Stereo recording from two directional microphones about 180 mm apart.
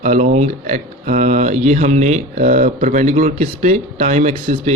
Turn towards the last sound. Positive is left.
turn(degrees=-45)  # may be behind; listen again after turning